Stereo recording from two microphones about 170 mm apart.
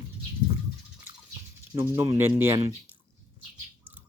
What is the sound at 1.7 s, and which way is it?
Speech, 15° right (ahead or behind).